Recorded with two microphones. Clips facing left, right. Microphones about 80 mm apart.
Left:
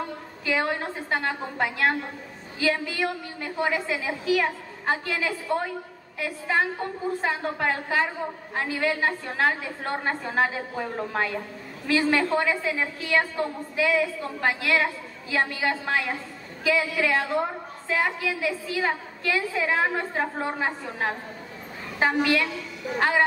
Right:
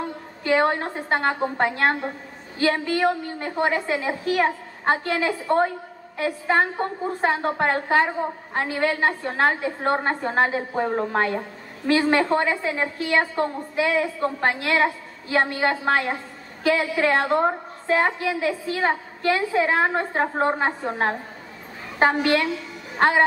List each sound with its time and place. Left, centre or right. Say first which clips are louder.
0.4 s a woman's voice: right 6 dB; right